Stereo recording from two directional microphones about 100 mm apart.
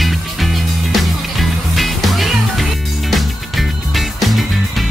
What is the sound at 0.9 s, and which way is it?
Music, centre (ahead or behind).